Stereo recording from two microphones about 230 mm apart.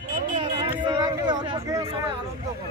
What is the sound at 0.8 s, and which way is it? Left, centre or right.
Speech, centre.